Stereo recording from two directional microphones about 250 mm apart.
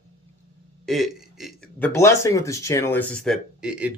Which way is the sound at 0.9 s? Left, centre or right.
Centre.